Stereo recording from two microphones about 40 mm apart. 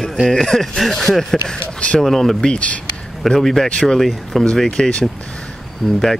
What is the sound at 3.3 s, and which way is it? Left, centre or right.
Speech, centre.